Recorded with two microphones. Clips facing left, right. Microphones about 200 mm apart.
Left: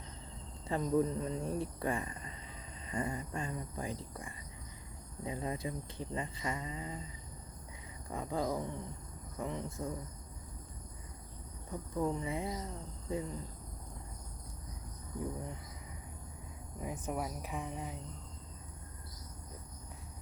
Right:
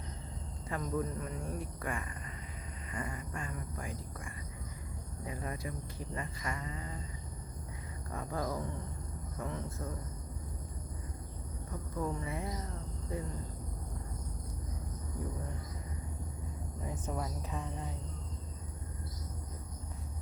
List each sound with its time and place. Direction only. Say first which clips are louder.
0.7 s speech: left 5 dB; 25° left (ahead or behind)
8.1 s speech: left 2 dB; 15° left (ahead or behind)
11.9 s speech: left 3 dB; 20° left (ahead or behind)
16.8 s speech: left 1 dB; 10° left (ahead or behind)